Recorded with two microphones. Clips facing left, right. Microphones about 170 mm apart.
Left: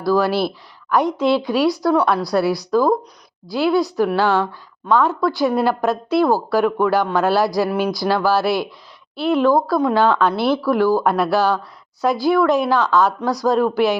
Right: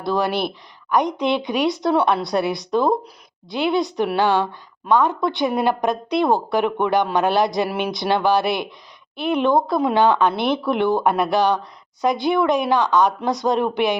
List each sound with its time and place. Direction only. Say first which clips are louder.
0.0 s a woman's voice: left 4 dB; 20° right (ahead or behind)